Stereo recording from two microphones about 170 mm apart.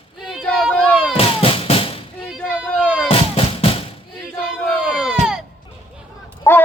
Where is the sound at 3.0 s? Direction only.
35° left (ahead or behind).